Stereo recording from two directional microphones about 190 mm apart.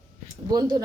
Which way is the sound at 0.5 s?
20° right (ahead or behind).